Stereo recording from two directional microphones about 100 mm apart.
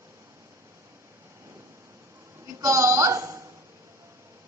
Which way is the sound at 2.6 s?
30° right (ahead or behind).